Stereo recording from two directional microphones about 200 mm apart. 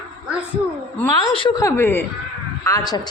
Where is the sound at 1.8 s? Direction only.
10° left (ahead or behind).